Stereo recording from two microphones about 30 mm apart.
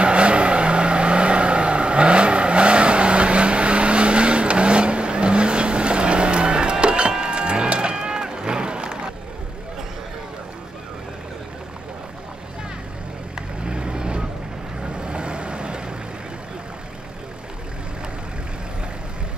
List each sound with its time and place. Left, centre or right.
0.0 s vehicle: right
13.7 s vehicle: right